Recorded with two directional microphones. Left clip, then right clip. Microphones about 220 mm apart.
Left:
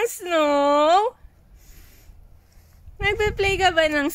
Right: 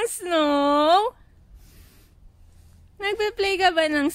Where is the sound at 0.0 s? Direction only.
15° right (ahead or behind).